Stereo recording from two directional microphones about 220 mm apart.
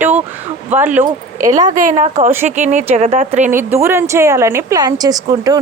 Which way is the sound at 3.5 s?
10° right (ahead or behind).